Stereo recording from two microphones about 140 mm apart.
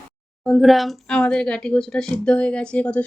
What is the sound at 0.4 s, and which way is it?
A woman's voice, centre (ahead or behind).